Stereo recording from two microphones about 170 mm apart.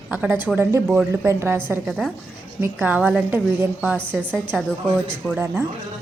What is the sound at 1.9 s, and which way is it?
Speech, centre (ahead or behind).